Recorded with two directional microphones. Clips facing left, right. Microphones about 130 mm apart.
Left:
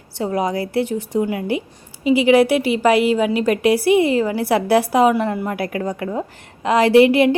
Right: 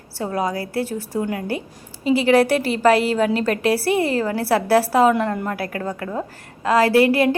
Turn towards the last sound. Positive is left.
turn(degrees=20)  # may be behind; listen again after turning